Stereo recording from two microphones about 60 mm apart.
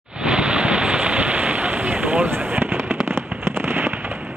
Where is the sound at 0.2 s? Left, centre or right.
Centre; by 3.0 s right.